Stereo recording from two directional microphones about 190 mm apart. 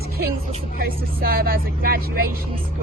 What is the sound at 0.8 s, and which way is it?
Speech, 50° right (ahead or behind).